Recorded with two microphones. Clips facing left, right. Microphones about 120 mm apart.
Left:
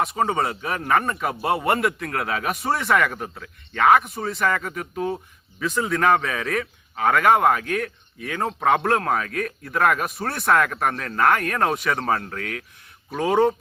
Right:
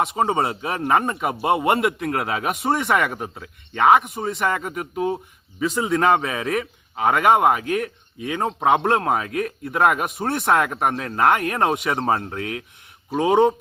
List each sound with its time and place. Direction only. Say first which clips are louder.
0.0 s speech: right 2 dB; 25° right (ahead or behind)